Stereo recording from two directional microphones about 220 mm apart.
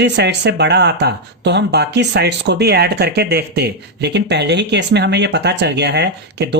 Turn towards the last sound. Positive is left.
turn(degrees=-50)  # may be behind; listen again after turning